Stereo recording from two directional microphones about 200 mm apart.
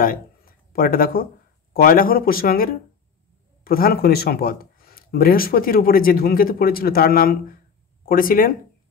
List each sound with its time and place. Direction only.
0.0 s speech: 45° left (ahead or behind)